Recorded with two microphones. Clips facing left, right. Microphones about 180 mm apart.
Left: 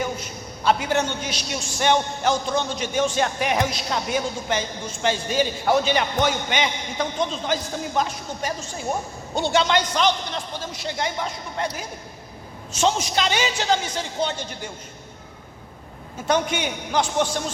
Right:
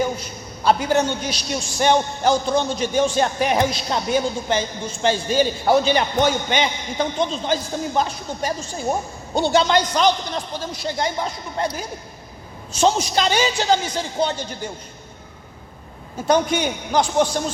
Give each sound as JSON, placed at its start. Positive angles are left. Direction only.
{"t": 0.0, "sound": "a man's voice", "side_deg": -35}
{"t": 16.2, "sound": "a man's voice", "side_deg": -35}